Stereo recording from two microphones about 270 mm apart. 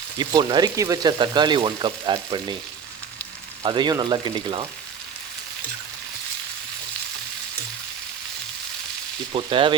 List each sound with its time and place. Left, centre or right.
0.2 s speech: centre
3.6 s speech: centre
9.3 s speech: centre